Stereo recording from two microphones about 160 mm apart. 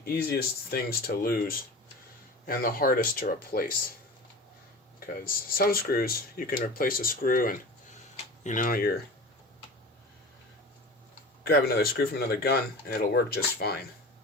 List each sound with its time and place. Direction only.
0.0 s speech: 70° left (ahead or behind)
4.9 s speech: 65° left (ahead or behind)
8.1 s speech: 50° left (ahead or behind); by 9.0 s 70° left (ahead or behind)
11.4 s speech: 75° left (ahead or behind)